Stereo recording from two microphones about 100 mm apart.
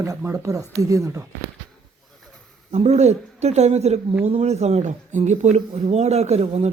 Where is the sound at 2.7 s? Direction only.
90° right.